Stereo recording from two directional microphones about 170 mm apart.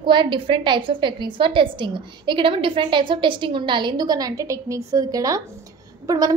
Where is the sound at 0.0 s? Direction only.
30° right (ahead or behind).